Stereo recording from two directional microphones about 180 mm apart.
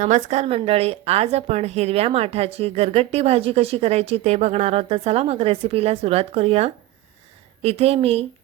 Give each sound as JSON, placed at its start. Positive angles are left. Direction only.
{"t": 0.0, "sound": "a woman's voice", "side_deg": -40}